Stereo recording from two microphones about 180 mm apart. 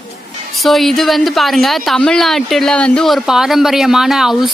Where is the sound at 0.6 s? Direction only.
Centre (ahead or behind).